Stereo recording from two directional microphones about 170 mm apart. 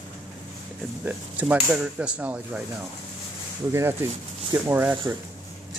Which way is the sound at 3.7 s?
15° right (ahead or behind).